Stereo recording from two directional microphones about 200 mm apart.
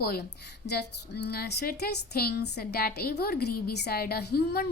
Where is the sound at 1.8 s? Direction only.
55° left (ahead or behind).